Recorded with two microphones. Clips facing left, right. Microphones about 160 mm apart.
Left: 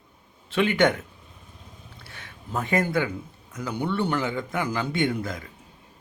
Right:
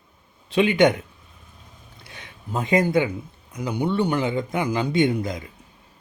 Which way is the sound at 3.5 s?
15° right (ahead or behind).